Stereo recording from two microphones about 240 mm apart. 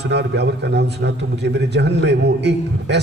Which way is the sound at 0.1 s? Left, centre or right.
Right.